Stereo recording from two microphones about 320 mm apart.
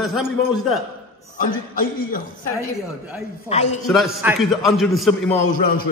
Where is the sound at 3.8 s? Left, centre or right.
Centre.